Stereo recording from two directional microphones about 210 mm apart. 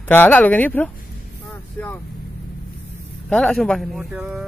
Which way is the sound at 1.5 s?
10° left (ahead or behind).